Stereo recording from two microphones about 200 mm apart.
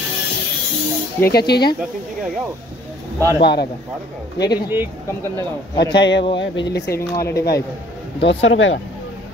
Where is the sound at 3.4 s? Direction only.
55° left (ahead or behind).